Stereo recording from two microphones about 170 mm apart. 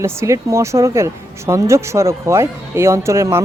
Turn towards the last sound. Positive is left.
turn(degrees=-15)  # may be behind; listen again after turning